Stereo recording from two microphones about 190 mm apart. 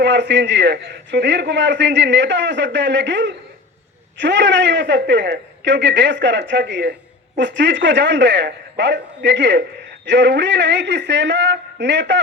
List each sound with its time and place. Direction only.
0.0 s a man's voice: 70° right (ahead or behind)